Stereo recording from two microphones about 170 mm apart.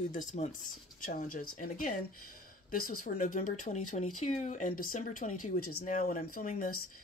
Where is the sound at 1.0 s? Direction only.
55° left (ahead or behind).